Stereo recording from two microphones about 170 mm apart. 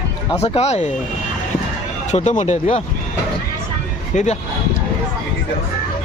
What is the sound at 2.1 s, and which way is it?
Speech, 45° left (ahead or behind).